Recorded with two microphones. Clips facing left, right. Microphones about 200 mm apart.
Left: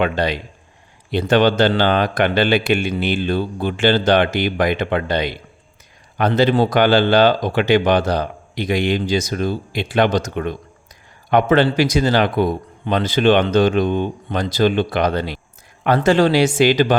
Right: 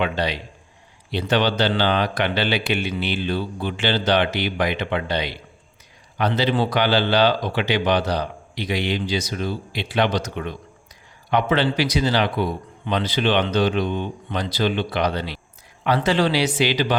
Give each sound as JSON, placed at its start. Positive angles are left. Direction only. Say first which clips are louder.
{"t": 0.0, "sound": "speech", "louder": "left 4 dB", "side_deg": 50}